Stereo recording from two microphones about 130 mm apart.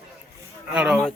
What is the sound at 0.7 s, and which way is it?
Speech, 10° right (ahead or behind).